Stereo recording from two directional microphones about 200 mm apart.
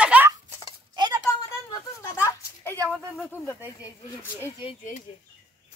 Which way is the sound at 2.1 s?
15° left (ahead or behind).